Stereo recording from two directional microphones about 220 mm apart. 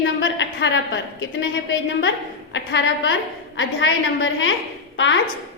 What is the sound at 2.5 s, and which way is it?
A woman's voice, 55° left (ahead or behind).